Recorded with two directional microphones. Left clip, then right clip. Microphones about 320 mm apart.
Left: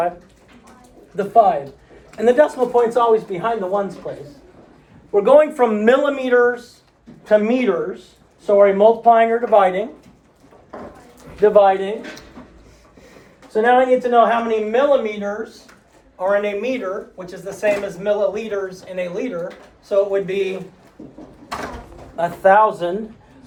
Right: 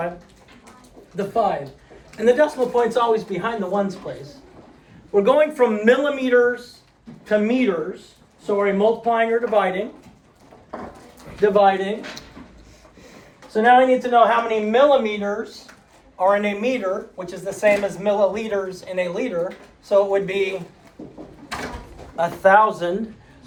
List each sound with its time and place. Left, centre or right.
1.1 s speech: centre
5.1 s speech: centre
11.3 s speech: centre
13.5 s speech: centre
22.1 s speech: centre